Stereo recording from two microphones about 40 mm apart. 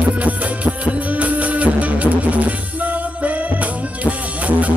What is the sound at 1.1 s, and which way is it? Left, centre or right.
Music, right.